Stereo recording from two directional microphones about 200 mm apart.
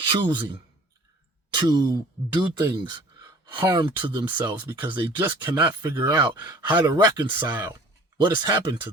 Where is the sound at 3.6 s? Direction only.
20° right (ahead or behind).